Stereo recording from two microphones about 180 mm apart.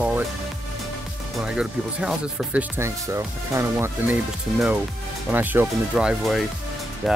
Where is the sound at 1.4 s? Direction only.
5° right (ahead or behind).